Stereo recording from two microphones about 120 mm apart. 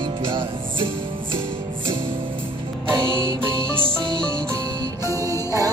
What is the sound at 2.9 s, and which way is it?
Music, 40° right (ahead or behind).